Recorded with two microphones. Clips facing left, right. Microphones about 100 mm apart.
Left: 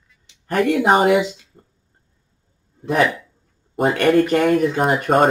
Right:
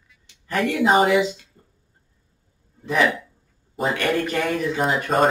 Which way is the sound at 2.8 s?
55° left (ahead or behind).